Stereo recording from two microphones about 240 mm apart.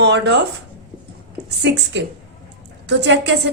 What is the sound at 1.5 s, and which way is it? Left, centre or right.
A woman's voice, right.